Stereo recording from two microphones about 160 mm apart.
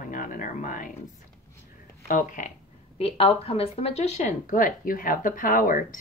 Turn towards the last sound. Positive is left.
turn(degrees=55)  # may be behind; listen again after turning